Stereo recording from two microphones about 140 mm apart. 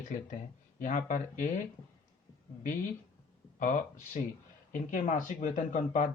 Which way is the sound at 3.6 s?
65° left (ahead or behind).